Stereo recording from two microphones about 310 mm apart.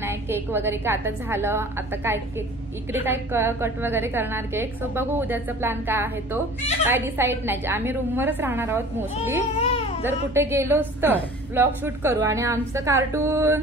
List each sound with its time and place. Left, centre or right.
0.0 s a woman's voice: centre
9.6 s baby cry: centre
10.0 s a woman's voice: centre